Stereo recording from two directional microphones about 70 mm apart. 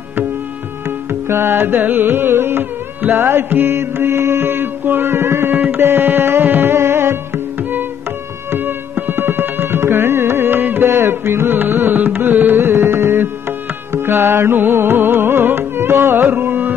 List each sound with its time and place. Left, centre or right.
0.8 s music: right